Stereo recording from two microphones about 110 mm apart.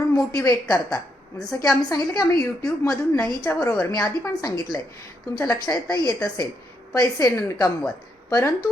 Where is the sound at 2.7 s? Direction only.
10° left (ahead or behind).